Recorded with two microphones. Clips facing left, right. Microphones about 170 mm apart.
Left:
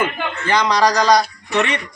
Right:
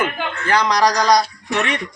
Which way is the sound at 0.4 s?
15° left (ahead or behind).